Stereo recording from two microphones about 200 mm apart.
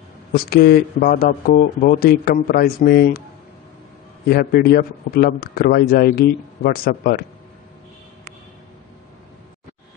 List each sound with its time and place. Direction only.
0.3 s a man's voice: 50° left (ahead or behind)
4.3 s a man's voice: 50° left (ahead or behind)